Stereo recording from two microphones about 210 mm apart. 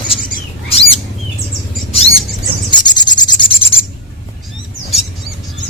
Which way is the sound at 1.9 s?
25° left (ahead or behind).